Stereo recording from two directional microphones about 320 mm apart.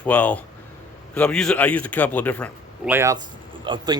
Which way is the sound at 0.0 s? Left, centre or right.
Centre.